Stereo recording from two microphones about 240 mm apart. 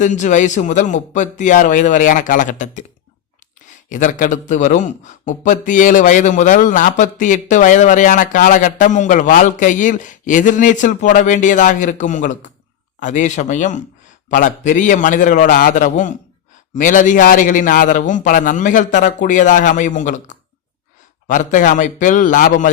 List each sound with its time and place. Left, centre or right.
0.0 s speech: left
3.8 s speech: left